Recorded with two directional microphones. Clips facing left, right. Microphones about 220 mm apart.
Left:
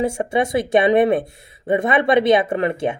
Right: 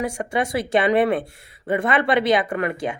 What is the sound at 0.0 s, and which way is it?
Speech, 25° left (ahead or behind).